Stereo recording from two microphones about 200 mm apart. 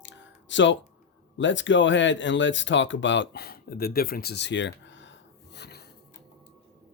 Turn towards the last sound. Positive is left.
turn(degrees=55)  # may be behind; listen again after turning